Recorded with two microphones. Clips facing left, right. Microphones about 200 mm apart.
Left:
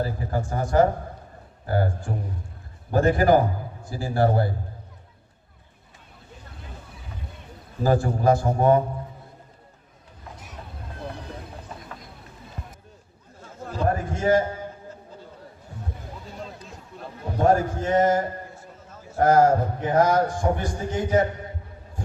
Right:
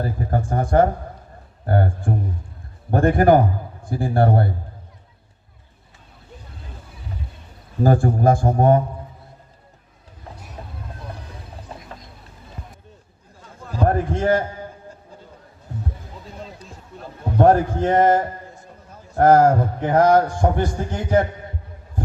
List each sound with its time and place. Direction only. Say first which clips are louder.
0.0 s a man's voice: right 3 dB; 55° right (ahead or behind)
7.9 s a man's voice: right 3 dB; 50° right (ahead or behind)
10.6 s a sound: right 5 dB; 35° right (ahead or behind)
13.8 s a man's voice: right 4 dB; 55° right (ahead or behind)
17.3 s a man's voice: right 5 dB; 60° right (ahead or behind)